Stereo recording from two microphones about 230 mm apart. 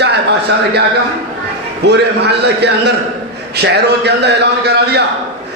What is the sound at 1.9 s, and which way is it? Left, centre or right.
A man's voice, right.